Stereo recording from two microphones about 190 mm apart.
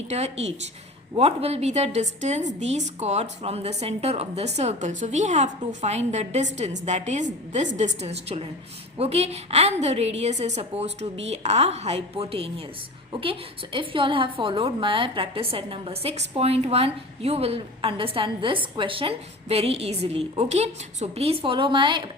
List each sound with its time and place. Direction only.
0.1 s a woman's voice: 35° right (ahead or behind)